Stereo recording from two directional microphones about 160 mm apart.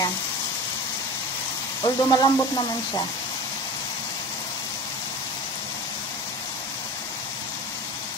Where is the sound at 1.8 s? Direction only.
25° left (ahead or behind).